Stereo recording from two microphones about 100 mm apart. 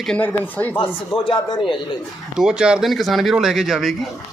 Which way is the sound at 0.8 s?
60° left (ahead or behind).